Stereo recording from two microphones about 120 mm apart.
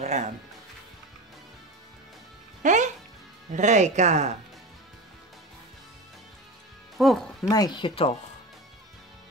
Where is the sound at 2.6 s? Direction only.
90° right; by 4.3 s 75° right (ahead or behind).